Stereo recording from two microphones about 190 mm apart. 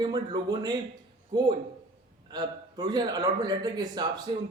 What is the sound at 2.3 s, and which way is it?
A man's voice, 25° right (ahead or behind).